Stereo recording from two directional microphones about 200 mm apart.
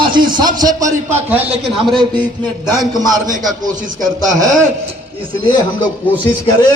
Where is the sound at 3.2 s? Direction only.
40° right (ahead or behind).